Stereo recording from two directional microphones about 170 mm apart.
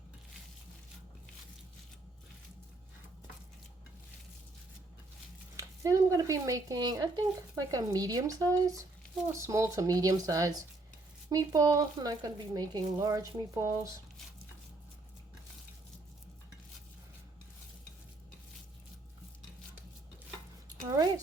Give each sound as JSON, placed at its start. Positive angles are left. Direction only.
{"t": 5.5, "sound": "speech", "side_deg": -20}